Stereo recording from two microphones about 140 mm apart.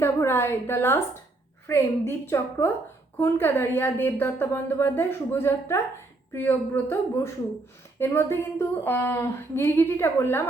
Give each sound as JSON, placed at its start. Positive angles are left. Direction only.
{"t": 0.0, "sound": "a woman's voice", "side_deg": 15}